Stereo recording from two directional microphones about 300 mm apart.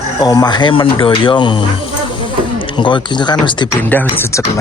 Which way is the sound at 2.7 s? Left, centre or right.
Centre.